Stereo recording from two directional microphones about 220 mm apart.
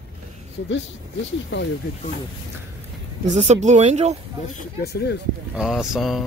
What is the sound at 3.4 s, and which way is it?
Speech, 30° right (ahead or behind).